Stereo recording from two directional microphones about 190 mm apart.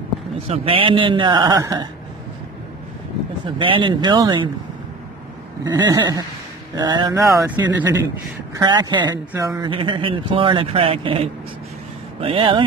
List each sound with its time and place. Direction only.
0.5 s speech: 30° right (ahead or behind)
3.4 s speech: 25° right (ahead or behind)
5.6 s speech: 20° right (ahead or behind)